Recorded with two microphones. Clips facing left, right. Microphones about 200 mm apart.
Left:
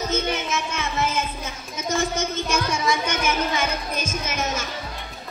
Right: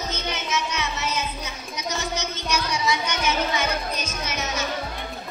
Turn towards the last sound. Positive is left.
turn(degrees=50)  # may be behind; listen again after turning